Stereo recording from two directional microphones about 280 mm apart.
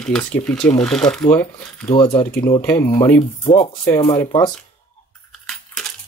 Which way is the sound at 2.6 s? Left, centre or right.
Centre.